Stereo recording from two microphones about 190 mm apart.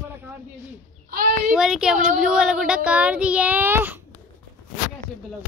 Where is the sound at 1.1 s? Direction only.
50° right (ahead or behind).